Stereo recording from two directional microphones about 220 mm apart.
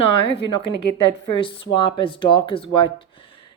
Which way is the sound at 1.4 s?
25° left (ahead or behind).